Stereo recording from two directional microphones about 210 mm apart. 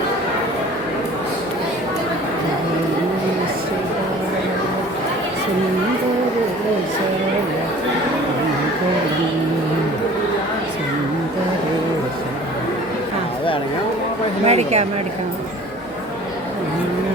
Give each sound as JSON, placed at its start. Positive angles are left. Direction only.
{"t": 14.4, "sound": "speech", "side_deg": -30}